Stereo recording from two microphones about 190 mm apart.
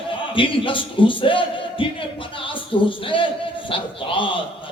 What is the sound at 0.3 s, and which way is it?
Speech, 25° left (ahead or behind).